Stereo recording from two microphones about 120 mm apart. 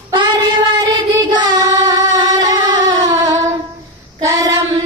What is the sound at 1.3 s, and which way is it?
Singing, 35° right (ahead or behind).